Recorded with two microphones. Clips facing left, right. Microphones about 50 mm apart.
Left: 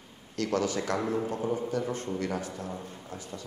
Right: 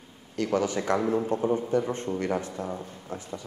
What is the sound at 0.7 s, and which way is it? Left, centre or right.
A man's voice, right.